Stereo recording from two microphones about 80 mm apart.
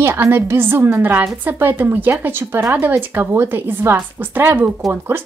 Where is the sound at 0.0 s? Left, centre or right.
Right.